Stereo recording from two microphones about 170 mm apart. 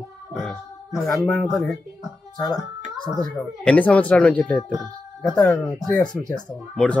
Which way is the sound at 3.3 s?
10° left (ahead or behind).